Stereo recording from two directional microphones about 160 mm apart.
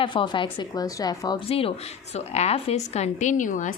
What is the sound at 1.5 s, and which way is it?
A woman's voice, 40° left (ahead or behind).